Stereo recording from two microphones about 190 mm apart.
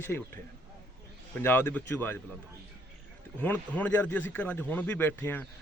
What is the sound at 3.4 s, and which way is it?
Speech, 10° left (ahead or behind).